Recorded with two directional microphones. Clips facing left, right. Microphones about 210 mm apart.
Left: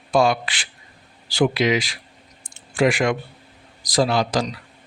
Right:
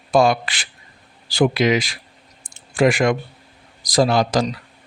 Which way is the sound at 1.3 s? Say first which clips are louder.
Right 2 dB; 45° right (ahead or behind).